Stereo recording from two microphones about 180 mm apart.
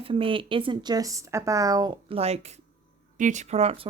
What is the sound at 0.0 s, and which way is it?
Speech, 30° right (ahead or behind).